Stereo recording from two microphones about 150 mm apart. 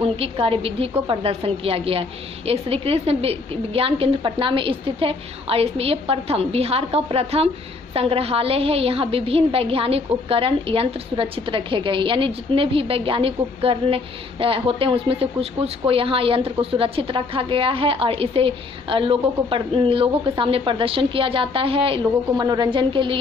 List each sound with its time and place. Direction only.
0.0 s a woman's voice: 40° right (ahead or behind)